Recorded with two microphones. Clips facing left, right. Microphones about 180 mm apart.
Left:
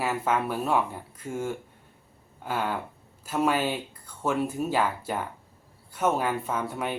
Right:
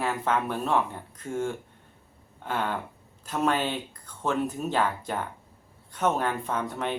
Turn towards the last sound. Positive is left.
turn(degrees=10)  # may be behind; listen again after turning